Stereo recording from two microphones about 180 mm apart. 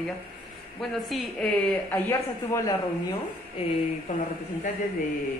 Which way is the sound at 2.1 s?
20° left (ahead or behind).